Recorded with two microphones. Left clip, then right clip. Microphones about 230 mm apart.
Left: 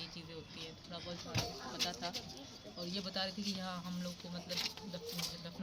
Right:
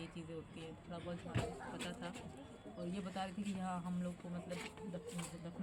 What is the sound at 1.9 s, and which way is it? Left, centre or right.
Speech, centre.